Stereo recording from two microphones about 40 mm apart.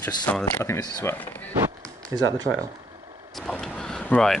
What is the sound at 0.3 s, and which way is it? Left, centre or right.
Speech, left.